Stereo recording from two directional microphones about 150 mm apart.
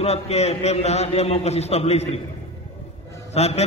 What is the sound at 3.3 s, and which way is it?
Speech, 45° left (ahead or behind).